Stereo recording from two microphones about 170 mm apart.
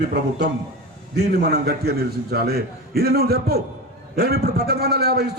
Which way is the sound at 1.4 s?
70° right (ahead or behind).